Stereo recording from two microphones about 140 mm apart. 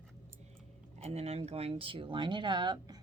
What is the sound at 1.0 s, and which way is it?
Speech, 50° right (ahead or behind).